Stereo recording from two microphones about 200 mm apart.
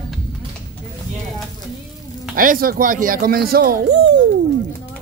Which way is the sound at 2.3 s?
45° right (ahead or behind).